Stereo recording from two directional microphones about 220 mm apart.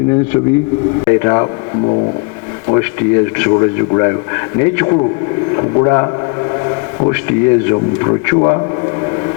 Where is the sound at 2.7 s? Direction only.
40° left (ahead or behind).